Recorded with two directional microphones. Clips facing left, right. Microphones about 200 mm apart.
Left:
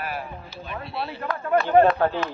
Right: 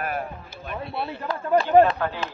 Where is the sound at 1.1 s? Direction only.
25° right (ahead or behind).